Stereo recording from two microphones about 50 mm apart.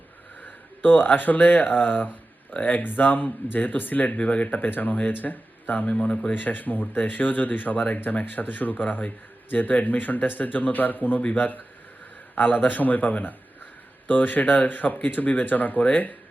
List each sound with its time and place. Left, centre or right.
0.4 s speech: left
6.3 s speech: left